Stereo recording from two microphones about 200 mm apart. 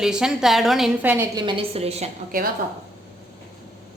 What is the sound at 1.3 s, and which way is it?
Speech, 25° right (ahead or behind).